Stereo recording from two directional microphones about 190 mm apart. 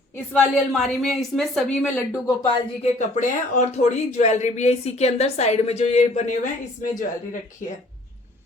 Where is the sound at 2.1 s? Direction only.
20° left (ahead or behind).